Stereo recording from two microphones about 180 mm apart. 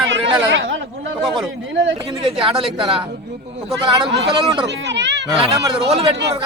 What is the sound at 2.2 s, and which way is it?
Speech, 30° right (ahead or behind).